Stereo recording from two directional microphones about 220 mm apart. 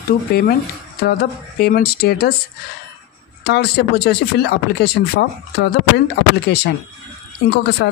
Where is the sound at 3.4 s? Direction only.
50° left (ahead or behind).